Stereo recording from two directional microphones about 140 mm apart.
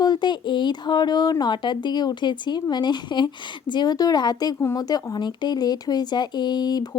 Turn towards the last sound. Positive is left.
turn(degrees=30)  # may be behind; listen again after turning